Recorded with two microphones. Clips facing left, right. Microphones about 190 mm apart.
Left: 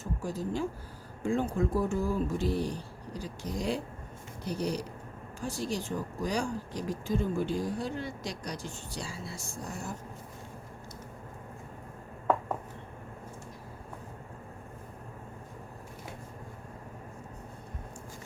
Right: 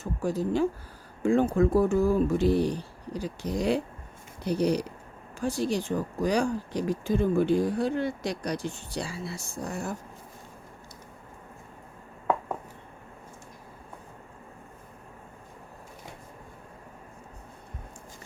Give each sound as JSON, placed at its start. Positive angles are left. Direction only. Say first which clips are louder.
{"t": 0.2, "sound": "speech", "louder": "right 8 dB", "side_deg": -70}